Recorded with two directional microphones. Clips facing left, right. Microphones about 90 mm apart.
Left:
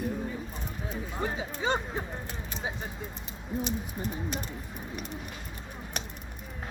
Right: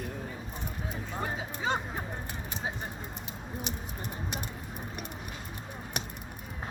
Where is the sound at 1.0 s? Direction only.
Centre (ahead or behind).